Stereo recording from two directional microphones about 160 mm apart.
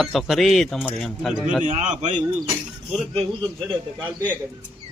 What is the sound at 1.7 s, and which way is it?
Speech, 50° right (ahead or behind).